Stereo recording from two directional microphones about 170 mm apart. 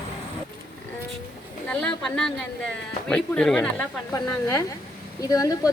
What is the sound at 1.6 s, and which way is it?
Speech, 5° left (ahead or behind).